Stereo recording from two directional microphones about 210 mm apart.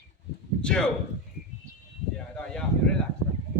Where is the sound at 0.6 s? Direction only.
5° left (ahead or behind).